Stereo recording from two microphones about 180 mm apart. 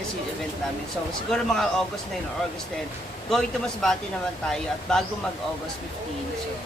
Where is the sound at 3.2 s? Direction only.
Centre (ahead or behind).